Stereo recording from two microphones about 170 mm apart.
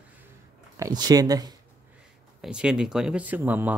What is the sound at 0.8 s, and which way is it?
Speech, 25° right (ahead or behind).